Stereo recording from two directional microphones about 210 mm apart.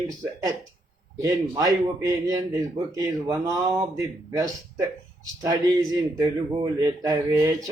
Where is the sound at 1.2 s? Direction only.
15° right (ahead or behind).